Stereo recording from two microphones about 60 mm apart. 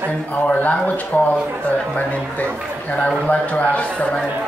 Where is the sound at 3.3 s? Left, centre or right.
Left.